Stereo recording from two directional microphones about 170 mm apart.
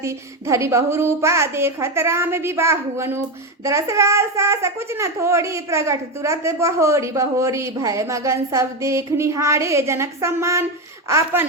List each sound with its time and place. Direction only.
0.0 s a child's voice: 15° right (ahead or behind)